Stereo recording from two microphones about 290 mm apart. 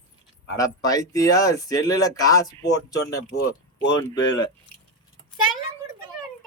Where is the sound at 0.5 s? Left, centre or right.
Centre.